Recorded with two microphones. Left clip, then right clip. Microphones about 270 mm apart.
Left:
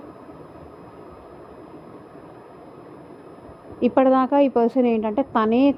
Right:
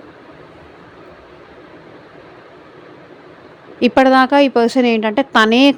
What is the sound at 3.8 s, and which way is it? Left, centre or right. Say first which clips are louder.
A woman's voice: right 7 dB; right.